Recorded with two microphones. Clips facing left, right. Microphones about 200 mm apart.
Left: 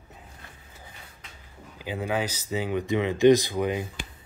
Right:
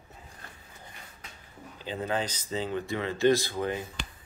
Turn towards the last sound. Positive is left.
turn(degrees=15)  # may be behind; listen again after turning